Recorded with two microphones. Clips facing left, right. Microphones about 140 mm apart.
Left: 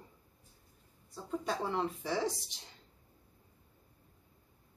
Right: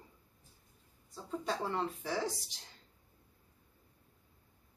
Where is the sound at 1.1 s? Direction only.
Centre (ahead or behind).